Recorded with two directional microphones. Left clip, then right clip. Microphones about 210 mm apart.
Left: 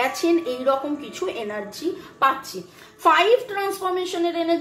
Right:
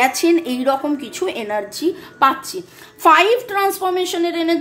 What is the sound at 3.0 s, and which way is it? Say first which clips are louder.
A woman's voice: right 4 dB; 50° right (ahead or behind).